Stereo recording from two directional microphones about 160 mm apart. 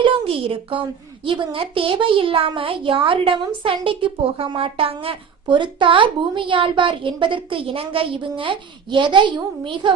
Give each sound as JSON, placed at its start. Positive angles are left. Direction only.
{"t": 0.0, "sound": "a woman's voice", "side_deg": -35}